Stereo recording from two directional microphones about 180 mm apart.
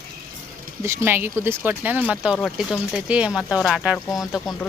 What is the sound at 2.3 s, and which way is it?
A woman's voice, centre (ahead or behind).